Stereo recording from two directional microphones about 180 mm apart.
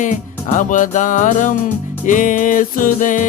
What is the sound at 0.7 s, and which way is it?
Music, 45° left (ahead or behind).